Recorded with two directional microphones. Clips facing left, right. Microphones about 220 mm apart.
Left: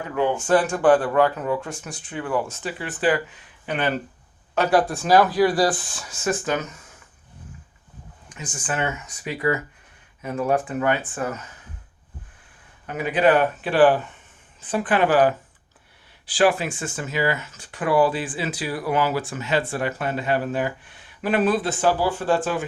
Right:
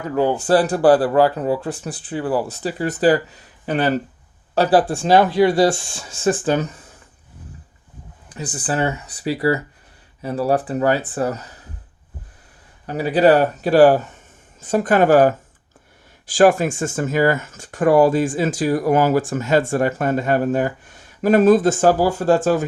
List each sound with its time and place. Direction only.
0.1 s speech: 35° right (ahead or behind)
8.3 s speech: 35° right (ahead or behind)
12.8 s speech: 35° right (ahead or behind)